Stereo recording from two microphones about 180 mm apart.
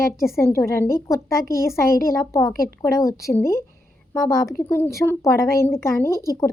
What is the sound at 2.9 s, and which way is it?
A woman's voice, 15° left (ahead or behind).